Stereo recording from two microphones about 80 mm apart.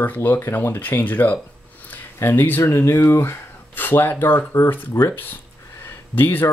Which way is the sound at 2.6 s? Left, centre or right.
Left.